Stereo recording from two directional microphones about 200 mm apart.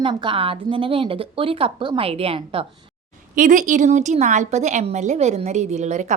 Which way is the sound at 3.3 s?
40° right (ahead or behind).